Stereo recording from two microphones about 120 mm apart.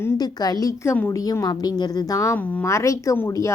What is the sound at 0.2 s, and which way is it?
A woman's voice, 35° left (ahead or behind).